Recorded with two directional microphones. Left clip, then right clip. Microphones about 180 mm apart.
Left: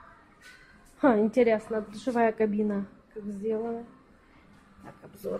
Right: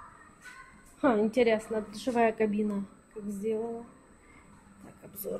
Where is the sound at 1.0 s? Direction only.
20° left (ahead or behind).